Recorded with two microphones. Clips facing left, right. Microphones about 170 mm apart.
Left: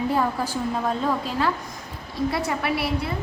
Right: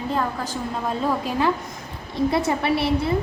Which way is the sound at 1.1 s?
15° right (ahead or behind).